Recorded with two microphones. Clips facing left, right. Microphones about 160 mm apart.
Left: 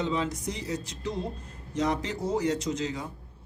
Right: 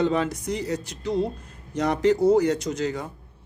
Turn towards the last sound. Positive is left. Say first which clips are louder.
# right 3 dB
turn(degrees=-65)  # may be behind; listen again after turning